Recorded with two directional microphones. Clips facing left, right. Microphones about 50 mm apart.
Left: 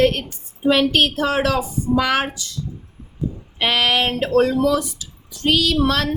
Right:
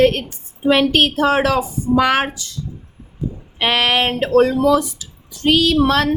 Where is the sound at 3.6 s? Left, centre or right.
Right.